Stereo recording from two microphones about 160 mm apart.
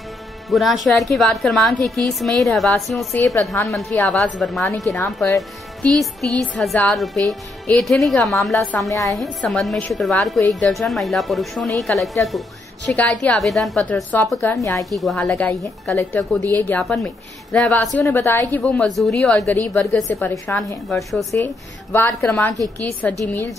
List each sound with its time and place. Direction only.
0.5 s a woman's voice: centre (ahead or behind)
4.9 s speech: 20° left (ahead or behind)
5.8 s a woman's voice: centre (ahead or behind)
8.7 s speech: 20° left (ahead or behind)
9.1 s a woman's voice: centre (ahead or behind); by 14.9 s 20° left (ahead or behind)
14.9 s a woman's voice: centre (ahead or behind)
20.9 s a woman's voice: centre (ahead or behind)
21.9 s a woman's voice: 15° left (ahead or behind)